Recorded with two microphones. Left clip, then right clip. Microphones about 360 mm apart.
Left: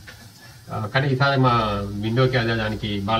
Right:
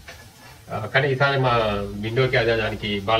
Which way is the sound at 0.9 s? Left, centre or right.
Centre.